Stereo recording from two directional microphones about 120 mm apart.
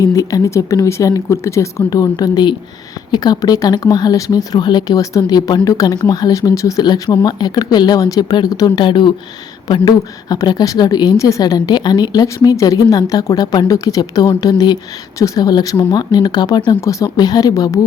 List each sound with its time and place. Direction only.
0.0 s speech: 30° left (ahead or behind)
16.8 s speech: 25° left (ahead or behind)